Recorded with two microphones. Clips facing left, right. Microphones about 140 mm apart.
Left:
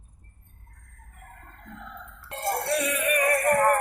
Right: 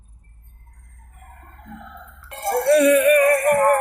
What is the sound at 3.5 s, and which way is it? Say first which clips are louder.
Music: right 5 dB; 20° right (ahead or behind).